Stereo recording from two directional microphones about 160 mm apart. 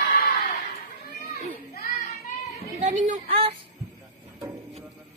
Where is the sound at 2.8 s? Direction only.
50° right (ahead or behind).